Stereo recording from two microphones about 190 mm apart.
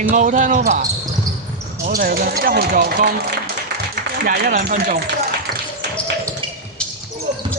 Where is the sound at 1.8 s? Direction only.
50° right (ahead or behind).